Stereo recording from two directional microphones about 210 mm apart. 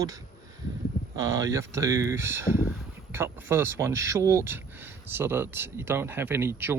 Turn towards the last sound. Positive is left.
turn(degrees=-10)  # may be behind; listen again after turning